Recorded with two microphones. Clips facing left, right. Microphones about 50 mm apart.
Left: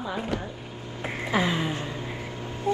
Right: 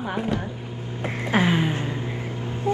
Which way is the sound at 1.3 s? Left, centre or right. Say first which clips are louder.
Right 4 dB; right.